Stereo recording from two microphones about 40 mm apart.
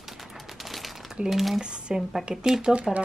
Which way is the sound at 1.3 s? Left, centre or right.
Centre.